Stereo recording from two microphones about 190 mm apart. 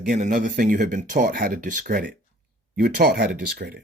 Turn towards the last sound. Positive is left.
turn(degrees=-55)  # may be behind; listen again after turning